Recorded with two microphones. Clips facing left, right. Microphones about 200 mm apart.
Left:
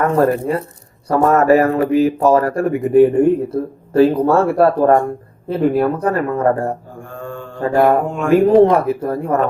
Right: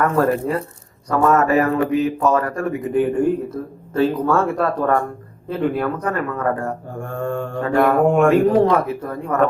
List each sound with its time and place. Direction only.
1.1 s speech: 35° left (ahead or behind)
7.1 s mantra: 60° right (ahead or behind)
7.6 s mantra: 30° left (ahead or behind)
8.0 s mantra: 60° right (ahead or behind)
8.3 s speech: 30° left (ahead or behind)